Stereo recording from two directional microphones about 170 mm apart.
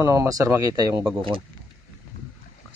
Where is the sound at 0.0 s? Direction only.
15° right (ahead or behind).